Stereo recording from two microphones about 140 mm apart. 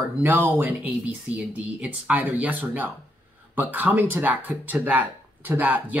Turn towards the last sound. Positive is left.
turn(degrees=-10)  # may be behind; listen again after turning